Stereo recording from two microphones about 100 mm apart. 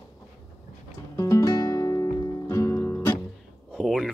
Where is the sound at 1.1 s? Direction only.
30° left (ahead or behind).